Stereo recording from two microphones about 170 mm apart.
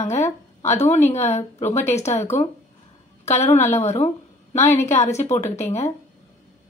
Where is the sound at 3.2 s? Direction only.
40° left (ahead or behind).